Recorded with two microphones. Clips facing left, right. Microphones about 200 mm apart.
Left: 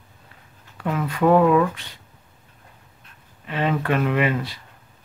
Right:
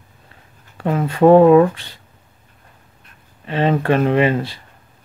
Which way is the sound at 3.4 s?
30° right (ahead or behind).